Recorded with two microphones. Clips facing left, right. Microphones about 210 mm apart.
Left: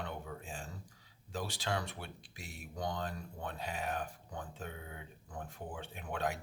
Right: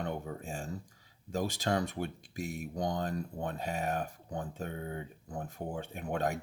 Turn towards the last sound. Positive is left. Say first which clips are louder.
# right 5 dB
turn(degrees=-45)  # may be behind; listen again after turning